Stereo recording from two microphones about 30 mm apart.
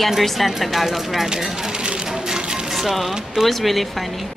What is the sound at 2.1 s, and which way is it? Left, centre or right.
Music, centre.